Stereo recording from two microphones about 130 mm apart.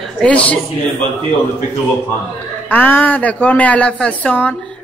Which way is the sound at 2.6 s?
15° left (ahead or behind).